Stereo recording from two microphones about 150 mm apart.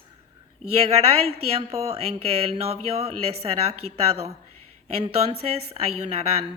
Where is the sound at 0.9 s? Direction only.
45° right (ahead or behind).